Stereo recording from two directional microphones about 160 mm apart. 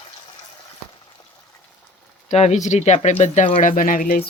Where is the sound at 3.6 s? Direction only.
55° left (ahead or behind).